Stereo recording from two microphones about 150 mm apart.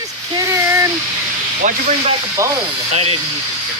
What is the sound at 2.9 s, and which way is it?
Speech, 45° right (ahead or behind).